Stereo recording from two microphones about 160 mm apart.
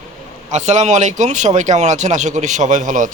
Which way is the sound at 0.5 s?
45° right (ahead or behind).